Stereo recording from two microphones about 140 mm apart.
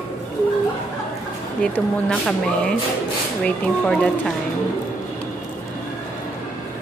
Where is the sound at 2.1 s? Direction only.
5° left (ahead or behind).